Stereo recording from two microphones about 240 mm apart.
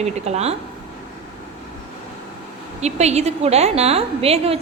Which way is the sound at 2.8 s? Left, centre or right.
Right.